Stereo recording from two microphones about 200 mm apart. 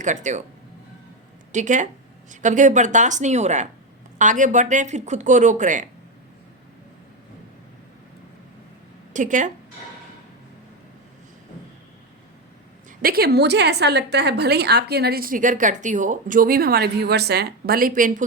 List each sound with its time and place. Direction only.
0.0 s speech: 40° right (ahead or behind)
1.5 s speech: 40° right (ahead or behind)
9.1 s speech: 40° right (ahead or behind)
13.0 s a woman's voice: 50° right (ahead or behind)